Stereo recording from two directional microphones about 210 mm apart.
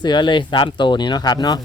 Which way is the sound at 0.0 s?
20° left (ahead or behind).